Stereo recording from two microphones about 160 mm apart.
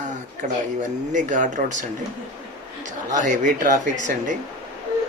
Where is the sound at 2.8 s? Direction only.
50° right (ahead or behind).